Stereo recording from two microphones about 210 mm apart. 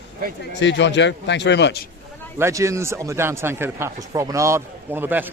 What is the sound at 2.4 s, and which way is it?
Speech, 15° right (ahead or behind).